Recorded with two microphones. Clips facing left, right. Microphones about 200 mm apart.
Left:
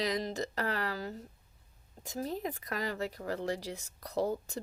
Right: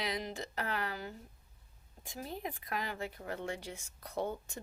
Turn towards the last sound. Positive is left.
turn(degrees=35)  # may be behind; listen again after turning